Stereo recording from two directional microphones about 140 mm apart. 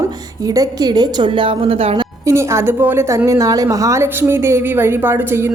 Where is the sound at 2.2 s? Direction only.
20° right (ahead or behind).